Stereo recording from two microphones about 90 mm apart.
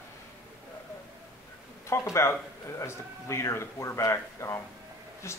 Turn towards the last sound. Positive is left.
turn(degrees=30)  # may be behind; listen again after turning